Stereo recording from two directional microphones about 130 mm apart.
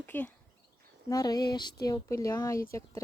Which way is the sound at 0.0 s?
15° left (ahead or behind).